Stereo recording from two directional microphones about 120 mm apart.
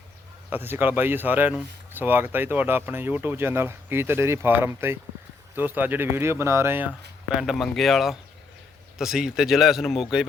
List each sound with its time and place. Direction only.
0.5 s speech: 15° right (ahead or behind)